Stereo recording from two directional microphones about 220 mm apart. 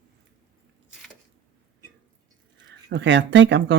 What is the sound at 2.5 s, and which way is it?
Speech, 55° right (ahead or behind).